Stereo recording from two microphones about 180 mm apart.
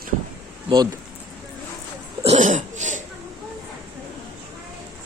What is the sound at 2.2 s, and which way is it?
Cough, 40° right (ahead or behind).